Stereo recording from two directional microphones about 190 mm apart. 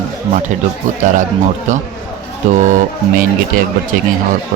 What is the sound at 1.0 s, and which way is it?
Speech, 40° right (ahead or behind).